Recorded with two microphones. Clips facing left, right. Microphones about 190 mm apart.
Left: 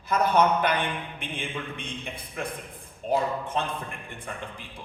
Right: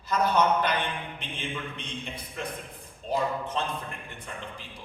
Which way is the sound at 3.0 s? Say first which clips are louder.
Left 2 dB; 55° left (ahead or behind).